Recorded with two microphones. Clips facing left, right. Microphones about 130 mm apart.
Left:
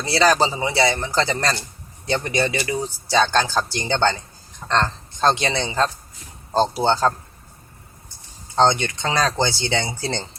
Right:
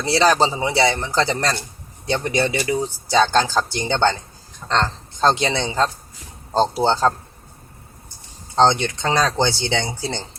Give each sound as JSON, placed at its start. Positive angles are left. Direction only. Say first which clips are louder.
{"t": 0.1, "sound": "speech", "louder": "right 1 dB", "side_deg": -20}
{"t": 8.5, "sound": "speech", "louder": "right 1 dB", "side_deg": -25}